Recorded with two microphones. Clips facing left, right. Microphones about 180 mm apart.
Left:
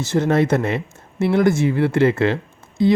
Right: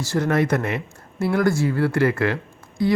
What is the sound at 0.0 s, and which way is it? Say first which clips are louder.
Speech: left 3 dB; 25° left (ahead or behind).